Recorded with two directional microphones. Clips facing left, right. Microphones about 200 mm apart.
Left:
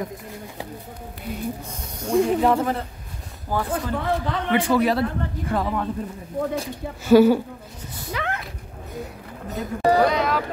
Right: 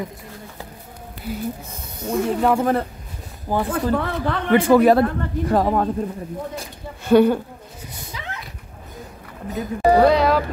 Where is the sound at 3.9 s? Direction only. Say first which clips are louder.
Right 2 dB; 55° right (ahead or behind).